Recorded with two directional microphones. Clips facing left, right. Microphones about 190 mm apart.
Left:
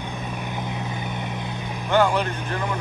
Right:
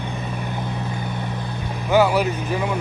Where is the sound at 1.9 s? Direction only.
5° right (ahead or behind).